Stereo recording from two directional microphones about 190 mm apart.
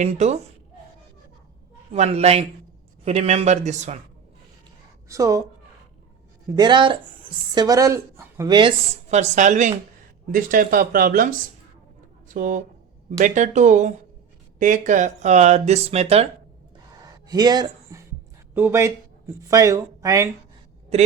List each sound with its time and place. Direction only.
0.0 s speech: 35° right (ahead or behind)
1.9 s speech: 35° right (ahead or behind)
5.0 s a woman's voice: 15° right (ahead or behind)
6.6 s a woman's voice: 25° right (ahead or behind)
9.0 s speech: 35° right (ahead or behind)
17.0 s a sound: 20° right (ahead or behind)
18.5 s speech: 15° right (ahead or behind)